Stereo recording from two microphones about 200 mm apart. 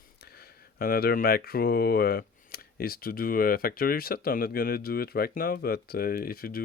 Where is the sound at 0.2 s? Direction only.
50° left (ahead or behind).